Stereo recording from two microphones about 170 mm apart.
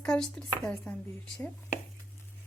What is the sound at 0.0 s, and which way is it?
Speech, 5° left (ahead or behind).